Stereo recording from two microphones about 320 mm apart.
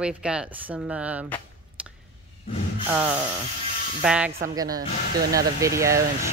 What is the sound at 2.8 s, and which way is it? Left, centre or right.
Speech, centre.